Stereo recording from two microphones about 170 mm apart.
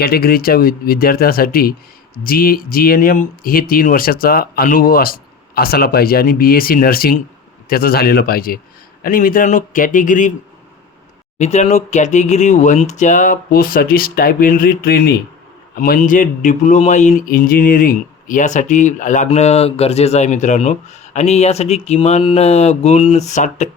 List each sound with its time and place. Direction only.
0.0 s speech: 65° left (ahead or behind)
11.3 s speech: 40° left (ahead or behind)